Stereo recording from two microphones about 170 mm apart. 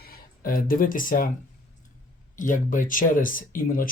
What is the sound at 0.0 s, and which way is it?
Speech, 60° left (ahead or behind).